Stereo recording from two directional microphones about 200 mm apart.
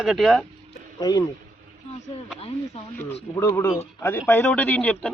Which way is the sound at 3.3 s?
15° left (ahead or behind).